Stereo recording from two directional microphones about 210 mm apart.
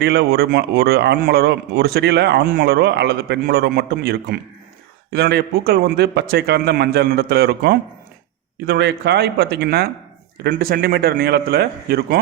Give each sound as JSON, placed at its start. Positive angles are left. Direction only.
{"t": 0.0, "sound": "a man's voice", "side_deg": -50}